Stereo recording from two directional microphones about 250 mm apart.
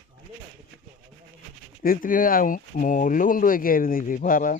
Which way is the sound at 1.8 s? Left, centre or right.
Left.